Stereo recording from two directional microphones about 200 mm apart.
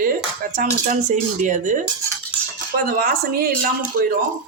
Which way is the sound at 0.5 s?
40° right (ahead or behind).